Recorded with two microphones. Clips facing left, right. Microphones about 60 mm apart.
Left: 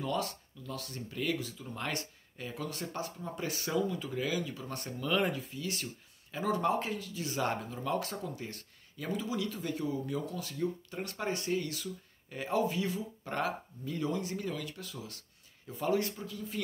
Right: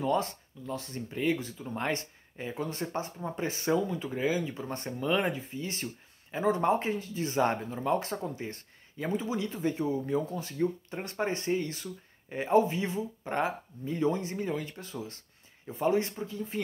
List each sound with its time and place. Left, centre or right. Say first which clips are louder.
0.0 s speech: right 5 dB; right